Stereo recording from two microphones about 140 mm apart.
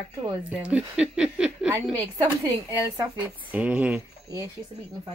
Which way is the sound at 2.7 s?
10° right (ahead or behind).